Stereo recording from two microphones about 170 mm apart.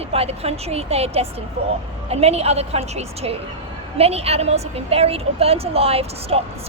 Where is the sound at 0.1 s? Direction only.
35° right (ahead or behind).